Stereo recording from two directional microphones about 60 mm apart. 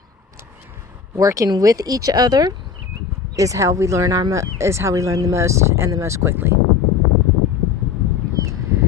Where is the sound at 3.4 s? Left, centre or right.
Right.